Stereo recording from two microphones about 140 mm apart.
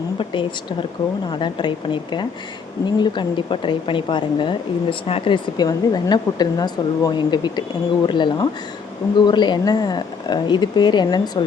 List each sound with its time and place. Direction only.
1.3 s a woman's voice: 35° left (ahead or behind)